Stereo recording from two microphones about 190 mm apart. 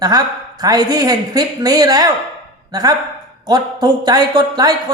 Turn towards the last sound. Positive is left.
turn(degrees=-20)  # may be behind; listen again after turning